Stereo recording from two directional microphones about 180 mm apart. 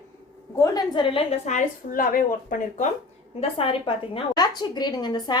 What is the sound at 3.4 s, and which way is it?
A woman's voice, 30° left (ahead or behind).